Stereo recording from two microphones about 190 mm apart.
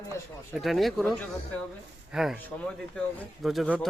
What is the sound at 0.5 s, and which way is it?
Speech, centre (ahead or behind).